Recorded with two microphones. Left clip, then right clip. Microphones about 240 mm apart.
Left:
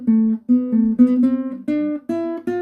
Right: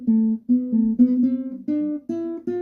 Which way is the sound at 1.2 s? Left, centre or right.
Centre.